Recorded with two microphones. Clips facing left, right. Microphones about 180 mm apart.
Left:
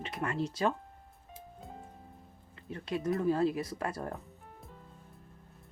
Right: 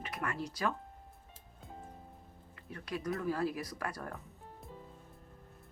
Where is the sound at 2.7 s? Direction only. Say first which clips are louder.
Left 5 dB; 25° left (ahead or behind).